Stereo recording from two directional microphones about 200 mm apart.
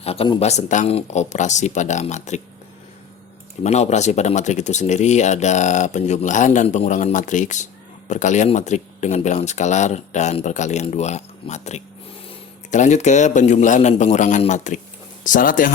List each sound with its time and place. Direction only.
0.0 s speech: 30° left (ahead or behind)
3.6 s speech: 35° left (ahead or behind)